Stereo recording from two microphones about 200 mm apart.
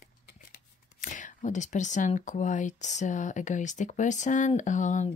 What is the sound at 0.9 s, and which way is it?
Speech, 40° left (ahead or behind).